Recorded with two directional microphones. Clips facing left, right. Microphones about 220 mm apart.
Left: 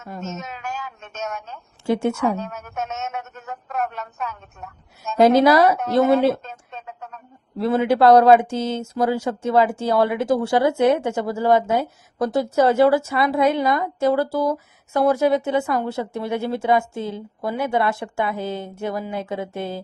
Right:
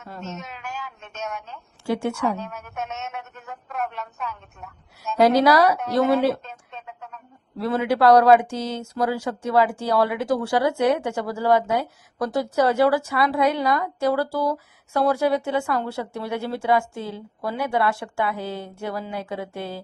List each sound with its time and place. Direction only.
0.2 s speech: 45° left (ahead or behind)
1.9 s speech: 25° left (ahead or behind)
2.1 s a woman's voice: 45° left (ahead or behind)
5.1 s speech: 25° left (ahead or behind)
6.4 s a sound: 45° left (ahead or behind)
7.6 s speech: 25° left (ahead or behind)